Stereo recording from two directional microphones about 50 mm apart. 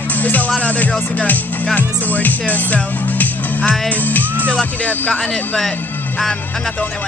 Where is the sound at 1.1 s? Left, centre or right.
Left.